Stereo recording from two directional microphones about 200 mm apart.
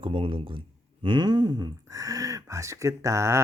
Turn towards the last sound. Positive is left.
turn(degrees=-15)  # may be behind; listen again after turning